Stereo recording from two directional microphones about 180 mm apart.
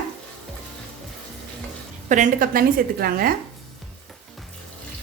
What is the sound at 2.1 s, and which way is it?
A woman's voice, 45° right (ahead or behind).